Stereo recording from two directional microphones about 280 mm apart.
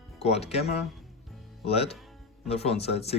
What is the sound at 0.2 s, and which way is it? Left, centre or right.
Speech, left.